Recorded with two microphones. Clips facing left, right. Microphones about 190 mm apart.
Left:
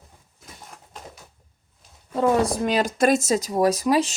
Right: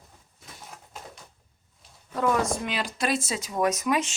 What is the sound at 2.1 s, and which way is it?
Speech, 30° left (ahead or behind).